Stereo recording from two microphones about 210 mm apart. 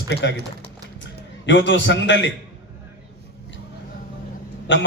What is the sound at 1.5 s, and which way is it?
Speech, 60° left (ahead or behind).